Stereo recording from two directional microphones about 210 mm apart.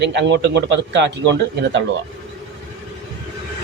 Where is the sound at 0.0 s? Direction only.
55° right (ahead or behind).